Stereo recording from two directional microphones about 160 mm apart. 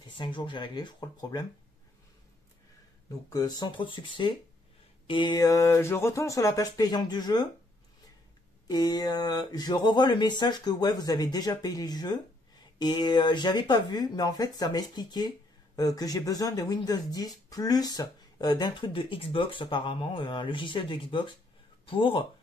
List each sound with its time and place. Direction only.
0.2 s speech: 30° left (ahead or behind)
3.1 s speech: 20° left (ahead or behind)
8.6 s speech: 25° left (ahead or behind)